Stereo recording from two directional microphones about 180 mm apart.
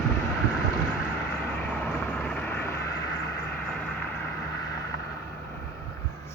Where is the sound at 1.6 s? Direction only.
5° left (ahead or behind).